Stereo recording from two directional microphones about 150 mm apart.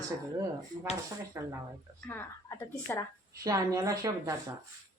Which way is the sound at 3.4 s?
20° right (ahead or behind).